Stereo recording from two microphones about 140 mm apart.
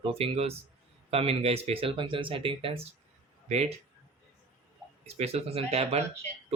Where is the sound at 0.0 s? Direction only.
45° right (ahead or behind).